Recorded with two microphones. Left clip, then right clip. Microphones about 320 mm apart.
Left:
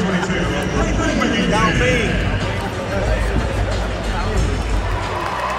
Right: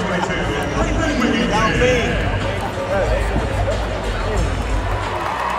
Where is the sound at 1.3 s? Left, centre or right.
Centre.